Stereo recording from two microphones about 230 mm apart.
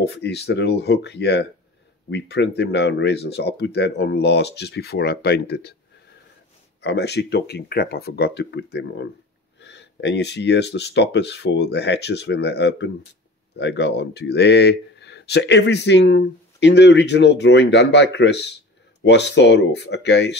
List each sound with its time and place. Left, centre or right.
0.0 s speech: left
6.8 s speech: left